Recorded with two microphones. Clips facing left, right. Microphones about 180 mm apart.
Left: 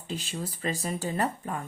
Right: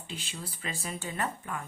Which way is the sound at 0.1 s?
40° left (ahead or behind).